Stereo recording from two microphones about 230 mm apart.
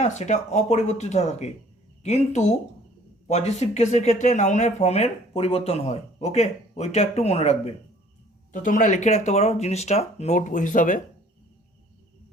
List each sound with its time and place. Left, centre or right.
0.0 s speech: left